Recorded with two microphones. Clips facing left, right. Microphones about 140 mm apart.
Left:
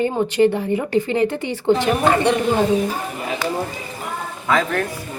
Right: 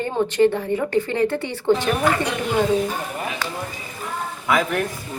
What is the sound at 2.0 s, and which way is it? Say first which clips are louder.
Speech: left 5 dB; 25° left (ahead or behind).